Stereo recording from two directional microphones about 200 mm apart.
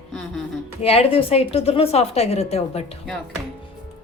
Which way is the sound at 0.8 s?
30° left (ahead or behind).